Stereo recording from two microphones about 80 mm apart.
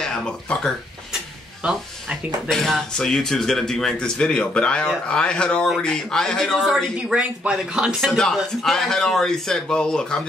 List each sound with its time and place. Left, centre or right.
0.0 s speech: centre
1.6 s speech: centre
2.5 s speech: centre
8.4 s speech: centre